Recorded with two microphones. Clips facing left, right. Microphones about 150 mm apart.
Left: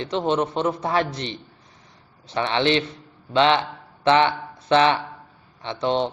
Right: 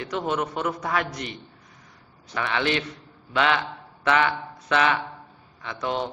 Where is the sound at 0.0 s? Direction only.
25° left (ahead or behind).